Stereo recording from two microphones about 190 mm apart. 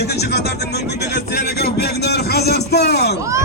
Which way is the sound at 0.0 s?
60° left (ahead or behind).